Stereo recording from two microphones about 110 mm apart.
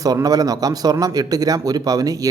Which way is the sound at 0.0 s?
35° right (ahead or behind).